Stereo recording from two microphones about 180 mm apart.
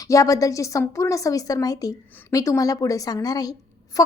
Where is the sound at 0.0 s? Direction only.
20° left (ahead or behind).